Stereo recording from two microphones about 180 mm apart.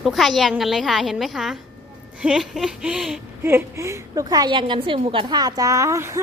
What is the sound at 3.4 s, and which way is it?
A woman's voice, 15° right (ahead or behind).